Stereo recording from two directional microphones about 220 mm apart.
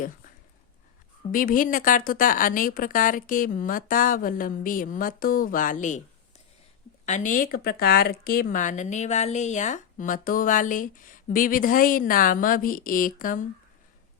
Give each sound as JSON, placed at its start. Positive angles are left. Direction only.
{"t": 1.3, "sound": "speech", "side_deg": 40}
{"t": 7.0, "sound": "speech", "side_deg": 35}